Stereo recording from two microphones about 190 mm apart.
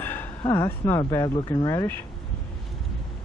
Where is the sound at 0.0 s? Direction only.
10° left (ahead or behind).